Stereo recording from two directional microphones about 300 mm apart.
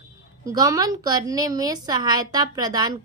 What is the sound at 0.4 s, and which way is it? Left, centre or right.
A woman's voice, centre.